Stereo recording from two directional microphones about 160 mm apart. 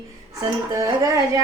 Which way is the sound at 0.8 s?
20° right (ahead or behind).